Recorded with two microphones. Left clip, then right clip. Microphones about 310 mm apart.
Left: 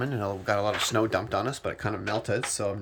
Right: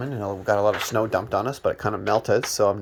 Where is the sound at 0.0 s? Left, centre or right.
Centre.